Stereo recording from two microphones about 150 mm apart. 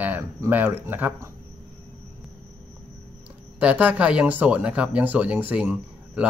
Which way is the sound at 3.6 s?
10° right (ahead or behind).